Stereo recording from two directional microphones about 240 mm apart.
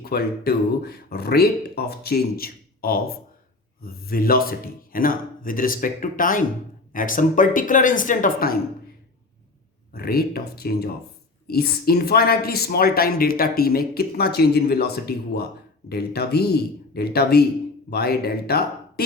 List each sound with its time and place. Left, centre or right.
0.0 s speech: left
9.9 s speech: left